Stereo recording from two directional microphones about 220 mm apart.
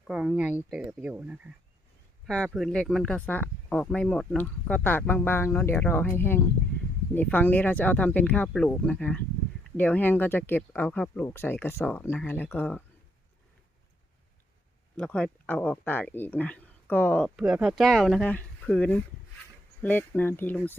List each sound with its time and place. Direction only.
0.1 s speech: 5° right (ahead or behind)
14.9 s speech: 5° left (ahead or behind)